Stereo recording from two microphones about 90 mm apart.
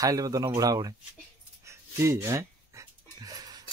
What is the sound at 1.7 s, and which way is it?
Dog, 30° right (ahead or behind).